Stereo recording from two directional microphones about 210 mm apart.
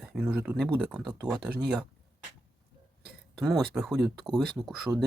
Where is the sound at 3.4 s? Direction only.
Centre (ahead or behind).